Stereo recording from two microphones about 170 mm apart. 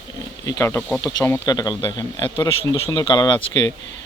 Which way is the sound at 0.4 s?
20° left (ahead or behind).